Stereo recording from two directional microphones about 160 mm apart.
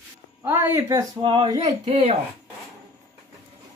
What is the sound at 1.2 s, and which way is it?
Speech, 30° right (ahead or behind).